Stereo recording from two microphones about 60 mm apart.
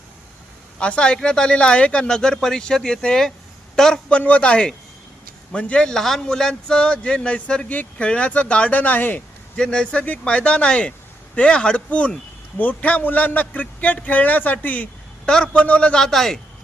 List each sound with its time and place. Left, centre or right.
0.8 s a man's voice: centre
4.1 s a man's voice: left
9.6 s a man's voice: centre